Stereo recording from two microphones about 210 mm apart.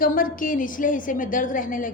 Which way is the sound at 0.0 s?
40° left (ahead or behind).